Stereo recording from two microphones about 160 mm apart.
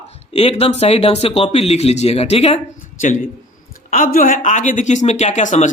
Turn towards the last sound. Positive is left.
turn(degrees=50)  # may be behind; listen again after turning